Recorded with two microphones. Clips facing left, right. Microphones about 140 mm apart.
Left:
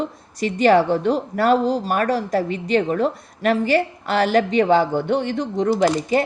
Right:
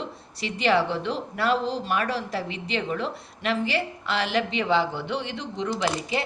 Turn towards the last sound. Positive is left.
turn(degrees=45)  # may be behind; listen again after turning